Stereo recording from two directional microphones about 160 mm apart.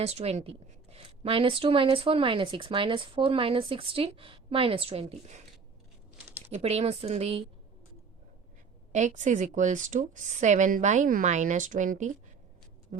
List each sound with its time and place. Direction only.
0.0 s a woman's voice: 40° right (ahead or behind)
6.5 s a woman's voice: 40° right (ahead or behind)
8.9 s a woman's voice: 50° right (ahead or behind)
12.9 s a sound: 45° right (ahead or behind)